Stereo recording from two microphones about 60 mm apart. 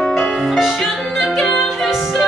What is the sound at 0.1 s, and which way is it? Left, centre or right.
Music, centre.